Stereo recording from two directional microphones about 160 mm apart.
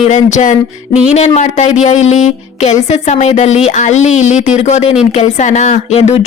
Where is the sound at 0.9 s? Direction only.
5° right (ahead or behind).